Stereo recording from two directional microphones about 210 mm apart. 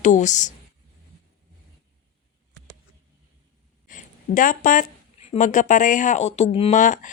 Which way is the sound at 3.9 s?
40° left (ahead or behind).